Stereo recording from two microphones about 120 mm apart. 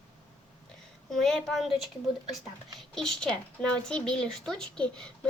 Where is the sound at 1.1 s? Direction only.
5° left (ahead or behind).